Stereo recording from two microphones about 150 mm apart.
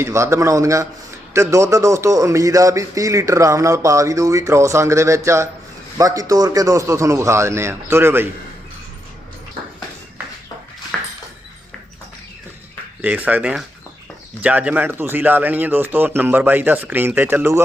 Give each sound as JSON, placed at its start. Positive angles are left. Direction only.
{"t": 0.0, "sound": "a man's voice", "side_deg": -20}
{"t": 10.9, "sound": "a sound", "side_deg": 5}
{"t": 13.0, "sound": "speech", "side_deg": -10}